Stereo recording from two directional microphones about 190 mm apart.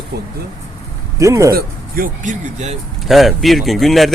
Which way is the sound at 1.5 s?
45° right (ahead or behind).